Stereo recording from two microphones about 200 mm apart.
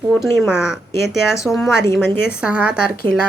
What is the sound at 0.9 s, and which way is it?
Speech, 15° left (ahead or behind).